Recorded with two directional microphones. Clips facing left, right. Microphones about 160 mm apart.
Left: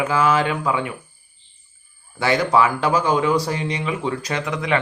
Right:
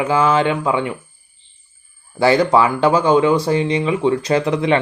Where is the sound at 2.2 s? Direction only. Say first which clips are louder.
Right 4 dB; 30° right (ahead or behind).